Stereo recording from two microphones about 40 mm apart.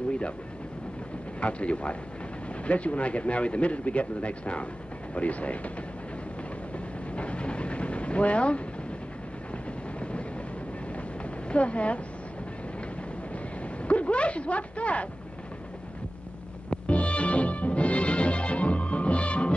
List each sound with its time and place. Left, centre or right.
1.4 s speech: left
7.2 s vehicle: left
11.4 s speech: left
13.8 s speech: left
16.7 s music: left